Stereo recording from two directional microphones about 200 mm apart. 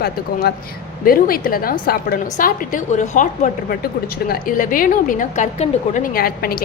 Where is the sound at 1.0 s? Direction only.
45° left (ahead or behind).